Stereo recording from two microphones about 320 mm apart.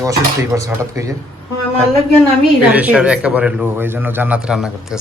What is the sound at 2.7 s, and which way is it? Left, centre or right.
A man's voice, centre.